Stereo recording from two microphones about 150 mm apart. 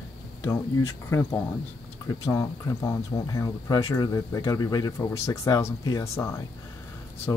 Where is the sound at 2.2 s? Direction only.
25° left (ahead or behind).